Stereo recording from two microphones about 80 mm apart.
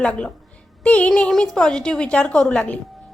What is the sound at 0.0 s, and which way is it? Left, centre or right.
A woman's voice, centre.